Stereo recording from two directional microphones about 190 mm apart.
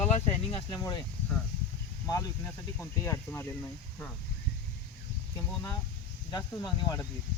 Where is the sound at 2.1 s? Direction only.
15° left (ahead or behind).